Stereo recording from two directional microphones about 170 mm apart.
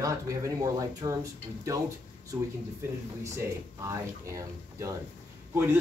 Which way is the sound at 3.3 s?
15° right (ahead or behind).